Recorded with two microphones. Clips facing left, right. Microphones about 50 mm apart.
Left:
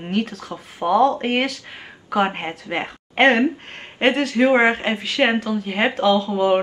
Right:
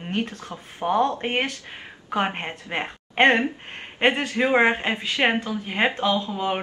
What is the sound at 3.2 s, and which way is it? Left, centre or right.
Speech, centre.